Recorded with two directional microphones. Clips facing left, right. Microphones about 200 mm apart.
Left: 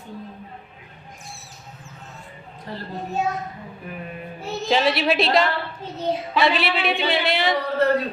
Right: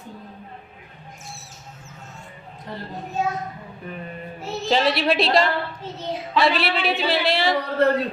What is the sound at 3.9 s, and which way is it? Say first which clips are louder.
A woman's voice: right 1 dB; 5° left (ahead or behind).